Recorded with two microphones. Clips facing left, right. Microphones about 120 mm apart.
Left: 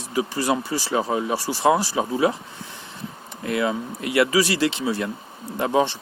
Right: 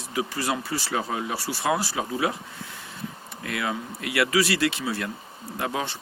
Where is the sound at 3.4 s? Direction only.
25° left (ahead or behind).